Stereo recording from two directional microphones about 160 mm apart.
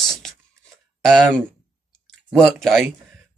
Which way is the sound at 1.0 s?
Centre (ahead or behind).